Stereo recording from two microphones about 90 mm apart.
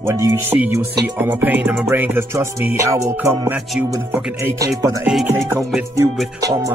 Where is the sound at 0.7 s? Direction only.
25° right (ahead or behind).